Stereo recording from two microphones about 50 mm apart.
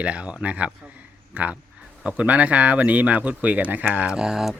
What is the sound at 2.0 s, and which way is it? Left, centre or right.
Speech, right.